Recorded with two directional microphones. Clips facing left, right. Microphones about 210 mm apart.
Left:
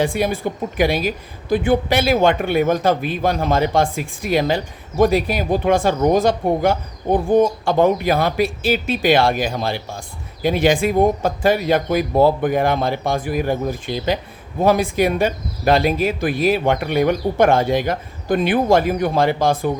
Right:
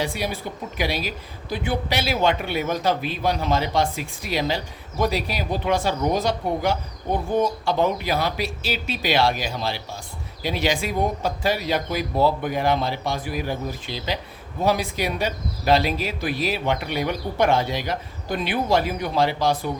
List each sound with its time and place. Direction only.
0.0 s a woman's voice: 50° left (ahead or behind)